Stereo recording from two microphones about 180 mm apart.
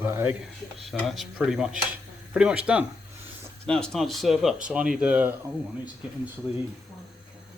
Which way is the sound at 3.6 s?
5° left (ahead or behind).